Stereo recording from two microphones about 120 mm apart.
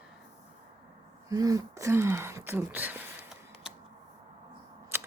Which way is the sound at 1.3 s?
30° right (ahead or behind).